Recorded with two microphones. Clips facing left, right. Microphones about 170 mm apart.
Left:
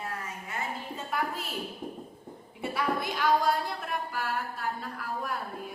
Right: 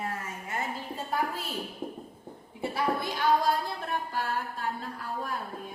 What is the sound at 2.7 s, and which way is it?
Speech, 30° right (ahead or behind).